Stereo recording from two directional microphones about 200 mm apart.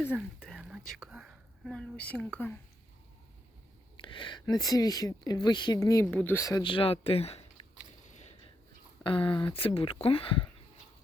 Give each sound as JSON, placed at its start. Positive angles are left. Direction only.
{"t": 0.1, "sound": "speech", "side_deg": 0}
{"t": 3.9, "sound": "speech", "side_deg": 25}
{"t": 6.1, "sound": "speech", "side_deg": 5}
{"t": 8.1, "sound": "a sound", "side_deg": 35}
{"t": 9.0, "sound": "speech", "side_deg": 25}